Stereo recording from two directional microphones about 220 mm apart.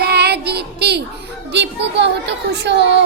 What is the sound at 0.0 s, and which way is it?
Child singing, 45° right (ahead or behind).